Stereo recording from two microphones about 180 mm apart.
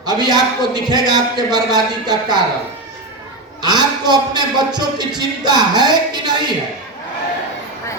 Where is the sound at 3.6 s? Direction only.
25° right (ahead or behind).